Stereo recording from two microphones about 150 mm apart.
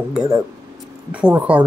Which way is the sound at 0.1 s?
25° right (ahead or behind).